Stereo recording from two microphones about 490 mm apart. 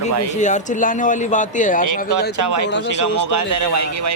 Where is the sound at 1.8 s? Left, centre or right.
Right.